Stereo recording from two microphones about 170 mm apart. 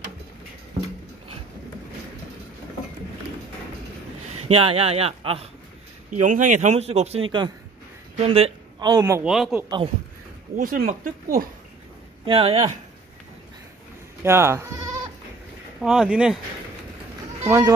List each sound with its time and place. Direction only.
4.5 s speech: 35° right (ahead or behind)
6.0 s speech: 50° right (ahead or behind)
8.8 s speech: 20° right (ahead or behind)
9.2 s speech: 5° right (ahead or behind)
10.5 s speech: 55° right (ahead or behind)
12.3 s speech: 35° right (ahead or behind)
14.2 s speech: 15° right (ahead or behind)
15.8 s speech: 5° right (ahead or behind)
17.5 s speech: 15° right (ahead or behind)